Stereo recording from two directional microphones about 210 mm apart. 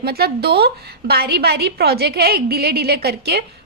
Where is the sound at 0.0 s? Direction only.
45° right (ahead or behind).